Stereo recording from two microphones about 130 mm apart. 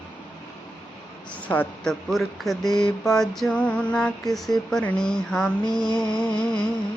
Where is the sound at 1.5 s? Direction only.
15° left (ahead or behind).